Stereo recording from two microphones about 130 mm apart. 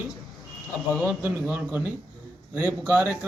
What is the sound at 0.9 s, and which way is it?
A man's voice, 15° right (ahead or behind).